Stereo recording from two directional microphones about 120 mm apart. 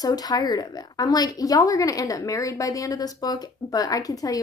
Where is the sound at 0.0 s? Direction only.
30° left (ahead or behind).